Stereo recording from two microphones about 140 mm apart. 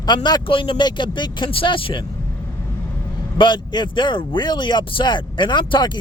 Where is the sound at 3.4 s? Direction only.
35° left (ahead or behind).